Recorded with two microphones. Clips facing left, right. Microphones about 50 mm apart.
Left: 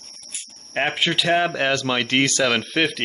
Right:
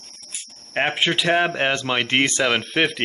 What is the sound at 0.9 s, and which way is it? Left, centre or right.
Speech, centre.